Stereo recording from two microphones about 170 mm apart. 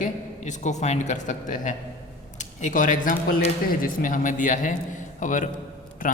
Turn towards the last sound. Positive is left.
turn(degrees=55)  # may be behind; listen again after turning